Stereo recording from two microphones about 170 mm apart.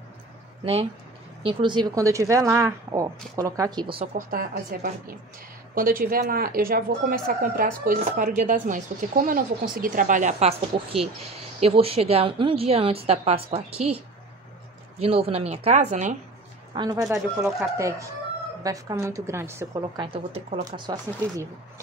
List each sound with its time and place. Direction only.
1.4 s a woman's voice: 30° right (ahead or behind)
4.0 s speech: 55° right (ahead or behind)
11.6 s a woman's voice: 35° right (ahead or behind)
15.0 s a woman's voice: 35° right (ahead or behind)
16.7 s a woman's voice: 25° right (ahead or behind)
17.0 s speech: centre (ahead or behind)
17.7 s a woman's voice: 20° right (ahead or behind)